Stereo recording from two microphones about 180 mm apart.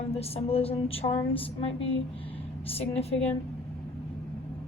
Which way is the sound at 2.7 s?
35° left (ahead or behind).